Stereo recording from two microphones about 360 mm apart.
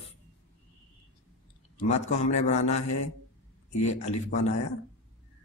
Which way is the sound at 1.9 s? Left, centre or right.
Centre.